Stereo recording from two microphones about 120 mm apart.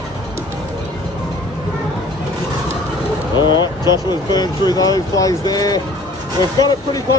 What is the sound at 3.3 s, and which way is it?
Speech, 40° left (ahead or behind).